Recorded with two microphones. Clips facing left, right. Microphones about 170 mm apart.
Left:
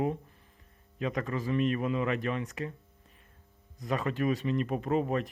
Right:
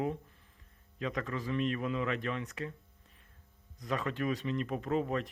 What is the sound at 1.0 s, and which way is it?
Speech, 15° left (ahead or behind).